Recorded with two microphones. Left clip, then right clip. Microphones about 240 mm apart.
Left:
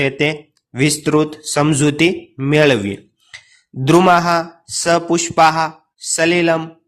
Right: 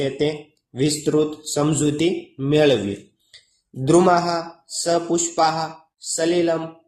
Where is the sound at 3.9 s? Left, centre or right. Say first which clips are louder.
Left 4 dB; left.